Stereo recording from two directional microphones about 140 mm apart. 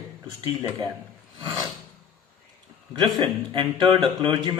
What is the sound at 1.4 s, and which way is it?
Filing, 35° right (ahead or behind).